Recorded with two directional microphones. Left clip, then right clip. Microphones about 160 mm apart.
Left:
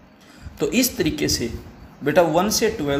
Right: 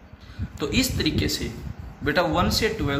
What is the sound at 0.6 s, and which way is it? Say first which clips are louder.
A man's voice: left 4 dB; 50° left (ahead or behind).